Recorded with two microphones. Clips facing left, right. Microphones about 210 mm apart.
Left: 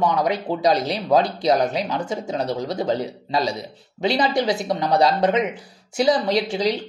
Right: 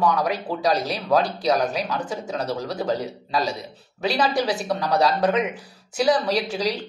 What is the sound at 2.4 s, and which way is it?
Speech, 25° left (ahead or behind).